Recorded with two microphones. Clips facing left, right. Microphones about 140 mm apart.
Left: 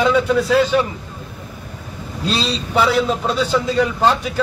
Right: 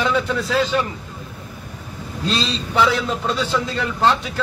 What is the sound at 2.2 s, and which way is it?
A man's voice, 10° left (ahead or behind).